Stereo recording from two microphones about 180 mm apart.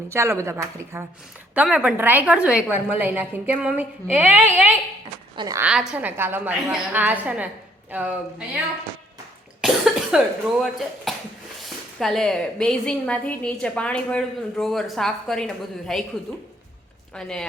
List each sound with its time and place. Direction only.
0.1 s a woman's voice: 15° right (ahead or behind)
5.4 s a woman's voice: 20° right (ahead or behind)
5.6 s a woman's voice: 5° right (ahead or behind)
9.6 s a woman's voice: 5° right (ahead or behind)
17.2 s a woman's voice: 5° left (ahead or behind)